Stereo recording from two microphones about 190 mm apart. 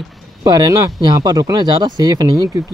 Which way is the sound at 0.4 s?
20° right (ahead or behind).